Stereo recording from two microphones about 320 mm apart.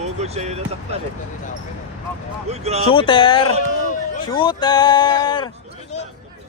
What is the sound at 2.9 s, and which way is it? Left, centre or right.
Speech, centre.